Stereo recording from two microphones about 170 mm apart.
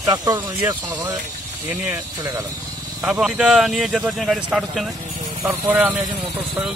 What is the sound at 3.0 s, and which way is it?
A man's voice, 5° right (ahead or behind).